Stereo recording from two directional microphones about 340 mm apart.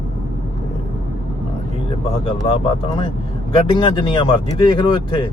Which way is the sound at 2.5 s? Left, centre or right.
Centre.